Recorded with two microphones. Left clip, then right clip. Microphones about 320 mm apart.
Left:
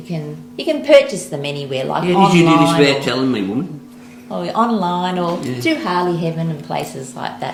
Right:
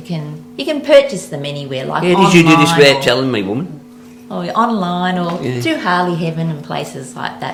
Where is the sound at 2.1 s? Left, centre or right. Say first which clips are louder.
Right 3 dB; right.